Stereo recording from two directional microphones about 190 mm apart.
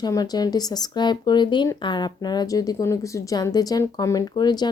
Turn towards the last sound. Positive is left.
turn(degrees=20)  # may be behind; listen again after turning